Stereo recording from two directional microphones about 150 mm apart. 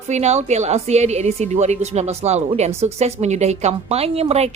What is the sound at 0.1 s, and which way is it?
A woman's voice, 50° right (ahead or behind).